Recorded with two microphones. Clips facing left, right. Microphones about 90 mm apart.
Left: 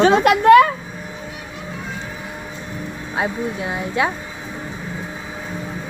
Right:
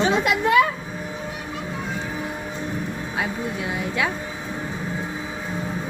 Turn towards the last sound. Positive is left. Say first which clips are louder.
# left 3 dB
turn(degrees=30)  # may be behind; listen again after turning